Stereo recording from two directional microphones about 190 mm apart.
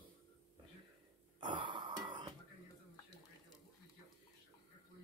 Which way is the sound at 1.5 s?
25° right (ahead or behind).